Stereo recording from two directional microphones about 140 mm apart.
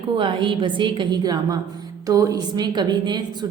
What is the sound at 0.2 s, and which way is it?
A woman's voice, 35° right (ahead or behind).